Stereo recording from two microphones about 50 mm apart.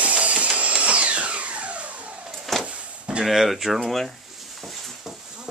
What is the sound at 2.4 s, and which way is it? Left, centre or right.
Vehicle, centre.